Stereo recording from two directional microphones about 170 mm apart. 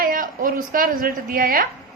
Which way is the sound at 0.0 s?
55° right (ahead or behind).